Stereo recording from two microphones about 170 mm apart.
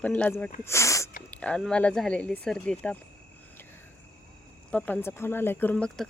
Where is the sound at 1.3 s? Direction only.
5° left (ahead or behind).